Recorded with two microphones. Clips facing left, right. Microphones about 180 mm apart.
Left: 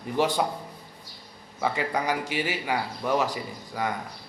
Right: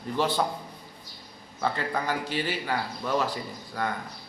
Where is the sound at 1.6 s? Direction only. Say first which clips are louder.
Left 2 dB; 15° left (ahead or behind).